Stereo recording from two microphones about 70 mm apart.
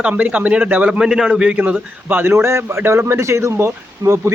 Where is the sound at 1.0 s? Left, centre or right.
Centre.